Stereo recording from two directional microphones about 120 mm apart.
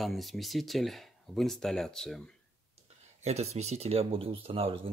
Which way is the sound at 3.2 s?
65° right (ahead or behind).